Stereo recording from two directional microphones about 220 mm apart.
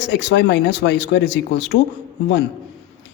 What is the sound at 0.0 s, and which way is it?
A man's voice, 50° left (ahead or behind).